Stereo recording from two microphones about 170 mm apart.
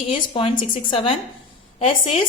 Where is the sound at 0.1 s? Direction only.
30° left (ahead or behind).